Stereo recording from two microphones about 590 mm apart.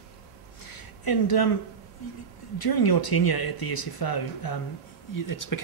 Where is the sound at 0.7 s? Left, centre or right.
Left.